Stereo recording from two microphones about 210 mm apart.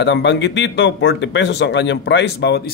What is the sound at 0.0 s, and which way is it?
A man's voice, 60° left (ahead or behind).